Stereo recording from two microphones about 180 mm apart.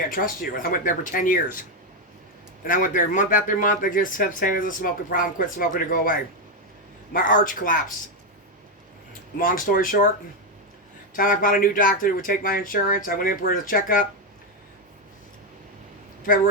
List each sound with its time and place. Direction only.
0.1 s speech: 50° left (ahead or behind)
2.6 s speech: 50° left (ahead or behind)
9.4 s speech: 50° left (ahead or behind)
11.1 s speech: 50° left (ahead or behind)